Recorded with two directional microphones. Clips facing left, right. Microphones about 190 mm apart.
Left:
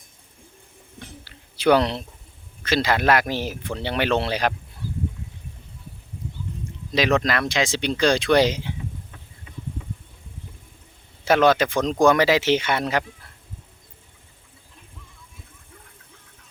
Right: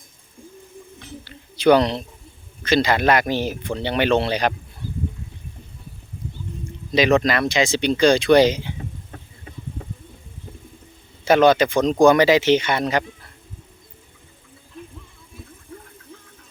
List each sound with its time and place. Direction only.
1.2 s a sound: 5° left (ahead or behind)
2.6 s speech: 5° left (ahead or behind)
6.9 s speech: centre (ahead or behind)
8.8 s vehicle: 45° right (ahead or behind)
11.3 s speech: centre (ahead or behind)